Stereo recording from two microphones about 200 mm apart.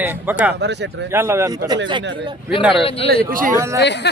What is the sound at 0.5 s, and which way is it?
Speech, 60° right (ahead or behind).